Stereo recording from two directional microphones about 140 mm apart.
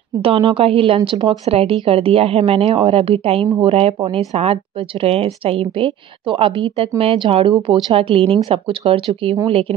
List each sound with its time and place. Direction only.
0.2 s a woman's voice: 40° right (ahead or behind)